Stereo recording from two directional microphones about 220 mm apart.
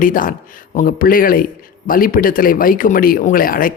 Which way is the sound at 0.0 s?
40° left (ahead or behind).